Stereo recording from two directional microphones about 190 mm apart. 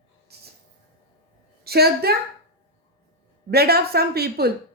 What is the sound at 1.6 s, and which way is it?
Speech, 55° right (ahead or behind).